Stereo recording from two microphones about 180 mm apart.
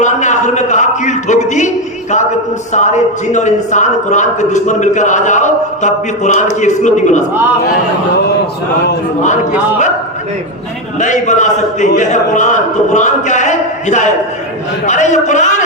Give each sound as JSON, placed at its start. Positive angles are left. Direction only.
{"t": 0.0, "sound": "a man's voice", "side_deg": 40}
{"t": 11.0, "sound": "a man's voice", "side_deg": 40}